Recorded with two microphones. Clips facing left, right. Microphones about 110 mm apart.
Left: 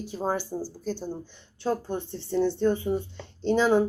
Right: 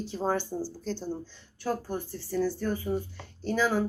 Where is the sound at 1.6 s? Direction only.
25° left (ahead or behind).